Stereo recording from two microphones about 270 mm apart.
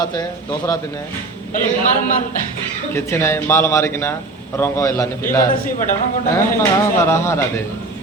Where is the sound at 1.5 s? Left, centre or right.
Left.